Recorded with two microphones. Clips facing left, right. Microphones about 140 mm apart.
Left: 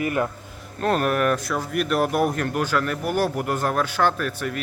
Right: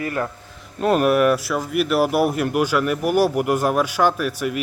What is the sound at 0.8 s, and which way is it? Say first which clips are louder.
Speech: right 5 dB; 10° right (ahead or behind).